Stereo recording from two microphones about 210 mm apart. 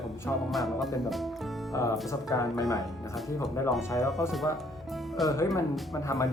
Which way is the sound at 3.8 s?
15° left (ahead or behind).